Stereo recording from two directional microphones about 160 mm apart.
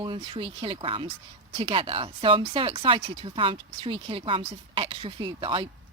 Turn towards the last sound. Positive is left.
turn(degrees=-30)  # may be behind; listen again after turning